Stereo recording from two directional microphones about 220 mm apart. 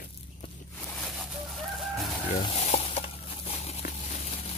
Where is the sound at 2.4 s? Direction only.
30° left (ahead or behind).